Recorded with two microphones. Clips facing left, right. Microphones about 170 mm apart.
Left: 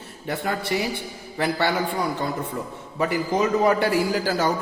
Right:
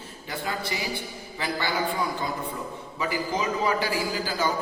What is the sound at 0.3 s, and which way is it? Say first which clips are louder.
A man's voice: left 6 dB; 60° left (ahead or behind).